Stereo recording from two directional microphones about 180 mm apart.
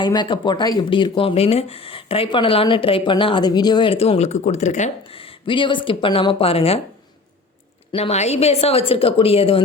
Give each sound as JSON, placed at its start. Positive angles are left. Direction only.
{"t": 0.0, "sound": "speech", "side_deg": 25}
{"t": 7.9, "sound": "speech", "side_deg": 35}